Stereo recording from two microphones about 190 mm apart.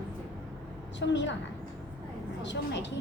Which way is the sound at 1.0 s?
70° left (ahead or behind).